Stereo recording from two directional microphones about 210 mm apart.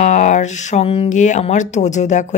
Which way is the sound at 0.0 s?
35° left (ahead or behind).